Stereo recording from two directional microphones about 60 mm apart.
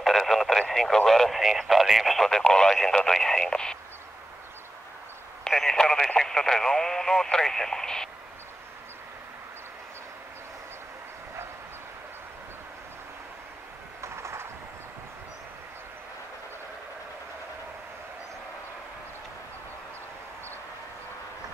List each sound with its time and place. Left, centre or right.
0.0 s speech: centre
5.4 s speech: centre
14.0 s a sound: right